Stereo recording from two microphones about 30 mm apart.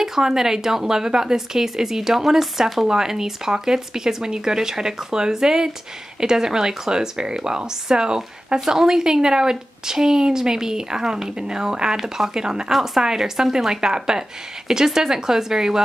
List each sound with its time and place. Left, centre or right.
0.0 s a woman's voice: centre